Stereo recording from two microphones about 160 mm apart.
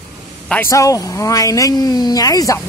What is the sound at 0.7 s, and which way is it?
Speech, 20° left (ahead or behind).